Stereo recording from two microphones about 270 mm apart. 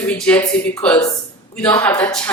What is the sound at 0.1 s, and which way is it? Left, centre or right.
A woman's voice, centre.